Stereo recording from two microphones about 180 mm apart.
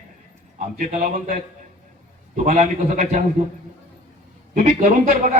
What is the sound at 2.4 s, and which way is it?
Speech, 45° right (ahead or behind).